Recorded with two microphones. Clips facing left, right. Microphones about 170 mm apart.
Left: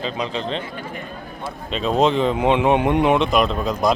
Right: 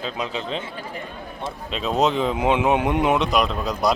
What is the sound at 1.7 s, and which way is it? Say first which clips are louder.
Speech: left 3 dB; centre (ahead or behind).